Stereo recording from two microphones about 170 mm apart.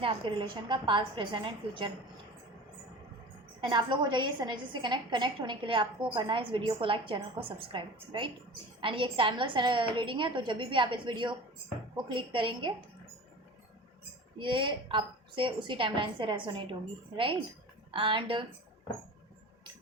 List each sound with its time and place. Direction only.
0.0 s a woman's voice: 30° right (ahead or behind)
3.6 s a woman's voice: 25° right (ahead or behind)
14.3 s a woman's voice: 30° right (ahead or behind)